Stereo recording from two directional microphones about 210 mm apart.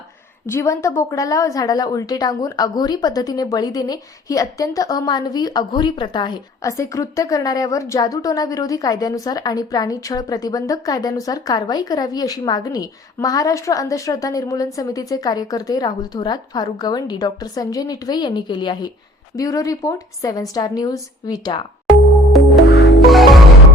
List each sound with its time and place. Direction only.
0.4 s a woman's voice: 15° left (ahead or behind)
22.6 s music: 65° left (ahead or behind)
23.0 s music: centre (ahead or behind)